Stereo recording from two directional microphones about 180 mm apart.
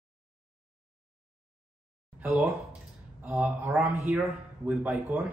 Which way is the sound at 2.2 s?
10° right (ahead or behind).